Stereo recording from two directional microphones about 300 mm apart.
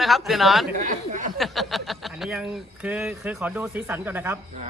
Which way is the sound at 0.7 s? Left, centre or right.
Right.